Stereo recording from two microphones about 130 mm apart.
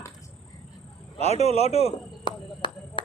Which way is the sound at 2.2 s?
35° left (ahead or behind).